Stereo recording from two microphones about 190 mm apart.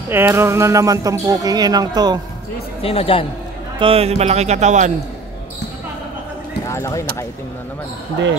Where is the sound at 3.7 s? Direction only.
30° right (ahead or behind).